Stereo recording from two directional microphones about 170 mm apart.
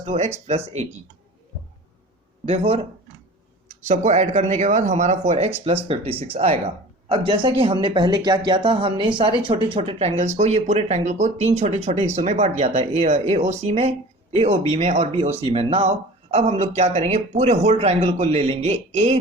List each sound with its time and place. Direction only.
0.0 s speech: 40° right (ahead or behind)
2.5 s speech: 35° right (ahead or behind)